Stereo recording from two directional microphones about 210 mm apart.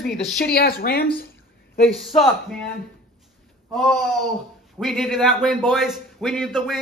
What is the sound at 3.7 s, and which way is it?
A man's voice, centre (ahead or behind).